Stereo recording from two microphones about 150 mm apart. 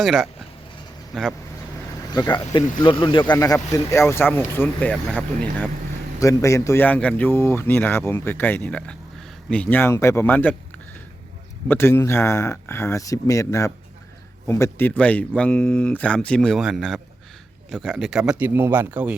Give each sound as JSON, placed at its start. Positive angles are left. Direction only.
{"t": 0.0, "sound": "speech", "side_deg": 0}
{"t": 2.0, "sound": "speech", "side_deg": 25}
{"t": 3.3, "sound": "speech", "side_deg": 20}
{"t": 6.1, "sound": "speech", "side_deg": 20}
{"t": 11.7, "sound": "speech", "side_deg": 15}